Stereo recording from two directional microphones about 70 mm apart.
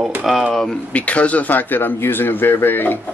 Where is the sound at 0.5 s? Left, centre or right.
Centre; by 3.0 s left.